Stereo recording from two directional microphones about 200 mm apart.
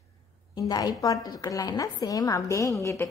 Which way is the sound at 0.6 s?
20° left (ahead or behind).